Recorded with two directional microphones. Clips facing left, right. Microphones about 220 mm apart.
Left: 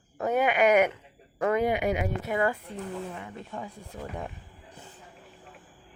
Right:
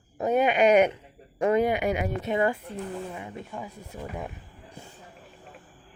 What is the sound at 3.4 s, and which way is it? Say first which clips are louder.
Speech: even; 5° right (ahead or behind).